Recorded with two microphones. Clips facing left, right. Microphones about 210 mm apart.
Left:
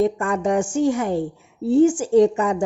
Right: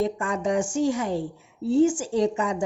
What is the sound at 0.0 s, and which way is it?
Speech, 55° left (ahead or behind).